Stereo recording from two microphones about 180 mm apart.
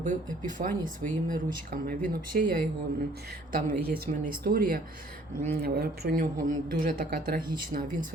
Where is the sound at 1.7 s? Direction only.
55° right (ahead or behind).